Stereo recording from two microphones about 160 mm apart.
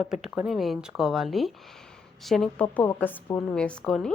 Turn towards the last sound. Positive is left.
turn(degrees=5)  # may be behind; listen again after turning